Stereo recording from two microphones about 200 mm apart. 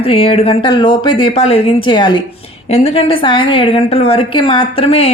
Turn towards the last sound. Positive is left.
turn(degrees=30)  # may be behind; listen again after turning